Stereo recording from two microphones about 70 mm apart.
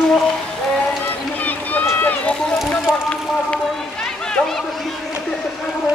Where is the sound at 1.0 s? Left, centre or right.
Left.